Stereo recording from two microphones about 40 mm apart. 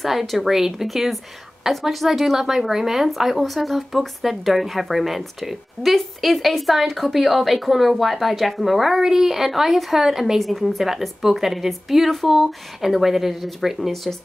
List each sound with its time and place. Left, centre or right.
0.0 s speech: centre
10.4 s speech: centre